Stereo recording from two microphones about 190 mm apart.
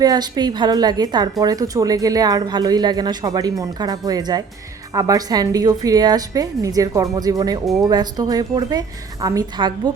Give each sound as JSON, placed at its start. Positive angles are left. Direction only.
{"t": 0.0, "sound": "a woman's voice", "side_deg": -20}